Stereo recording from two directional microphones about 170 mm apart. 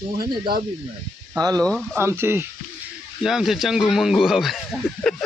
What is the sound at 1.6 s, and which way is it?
Speech, 5° left (ahead or behind).